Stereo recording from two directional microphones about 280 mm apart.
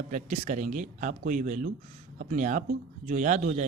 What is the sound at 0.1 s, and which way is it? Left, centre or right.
Speech, right.